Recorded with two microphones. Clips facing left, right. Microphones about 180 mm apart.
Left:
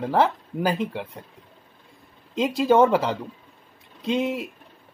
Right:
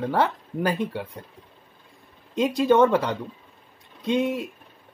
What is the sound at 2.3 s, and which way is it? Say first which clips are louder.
Speech: even; centre (ahead or behind).